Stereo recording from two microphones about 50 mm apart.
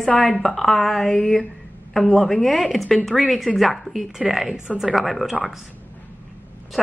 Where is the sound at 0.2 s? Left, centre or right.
Centre.